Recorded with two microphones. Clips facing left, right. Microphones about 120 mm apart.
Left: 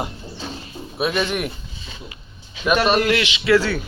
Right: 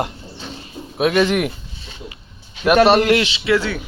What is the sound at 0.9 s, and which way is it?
Speech, 90° right.